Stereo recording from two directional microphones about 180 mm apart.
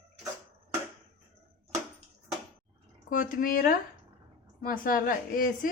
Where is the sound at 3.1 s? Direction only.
50° left (ahead or behind).